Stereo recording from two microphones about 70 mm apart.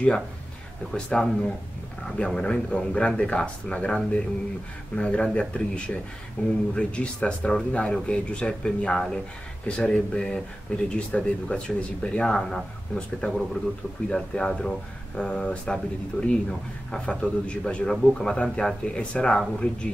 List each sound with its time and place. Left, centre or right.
0.9 s speech: centre